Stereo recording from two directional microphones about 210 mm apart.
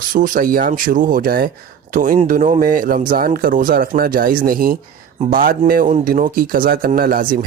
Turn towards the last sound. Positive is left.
turn(degrees=-40)  # may be behind; listen again after turning